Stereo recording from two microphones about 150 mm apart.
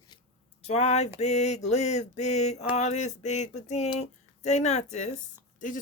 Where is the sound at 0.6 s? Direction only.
45° left (ahead or behind).